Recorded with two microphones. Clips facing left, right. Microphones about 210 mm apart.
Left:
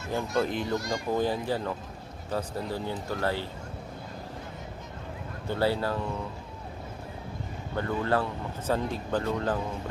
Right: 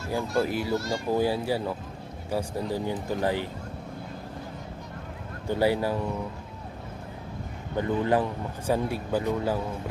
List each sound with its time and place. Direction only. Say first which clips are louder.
0.1 s speech: right 1 dB; 5° right (ahead or behind)
0.8 s speech: right 2 dB; 15° left (ahead or behind)
1.1 s speech: right 3 dB; 10° right (ahead or behind)
5.5 s speech: right 3 dB; 15° right (ahead or behind)
7.8 s speech: right 3 dB; 15° right (ahead or behind)